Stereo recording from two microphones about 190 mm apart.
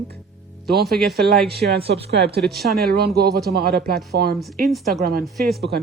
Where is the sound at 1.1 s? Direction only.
55° right (ahead or behind).